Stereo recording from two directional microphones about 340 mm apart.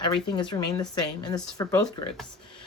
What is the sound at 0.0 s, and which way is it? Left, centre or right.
Speech, centre.